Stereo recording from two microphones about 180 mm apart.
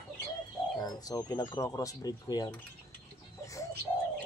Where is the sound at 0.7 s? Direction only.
20° left (ahead or behind).